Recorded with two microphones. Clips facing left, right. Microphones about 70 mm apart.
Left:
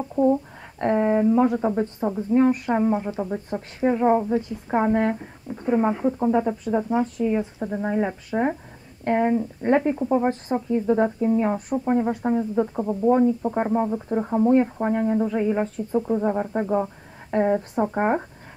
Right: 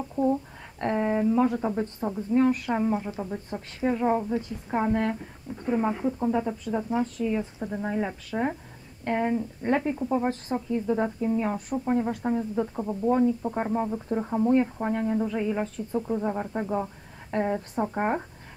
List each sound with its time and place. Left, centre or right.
0.1 s speech: centre